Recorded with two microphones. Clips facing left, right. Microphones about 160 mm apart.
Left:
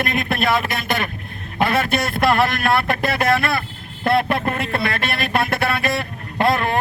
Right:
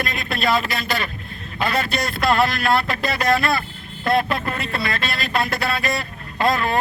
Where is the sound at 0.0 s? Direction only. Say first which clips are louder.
Left 3 dB; 55° left (ahead or behind).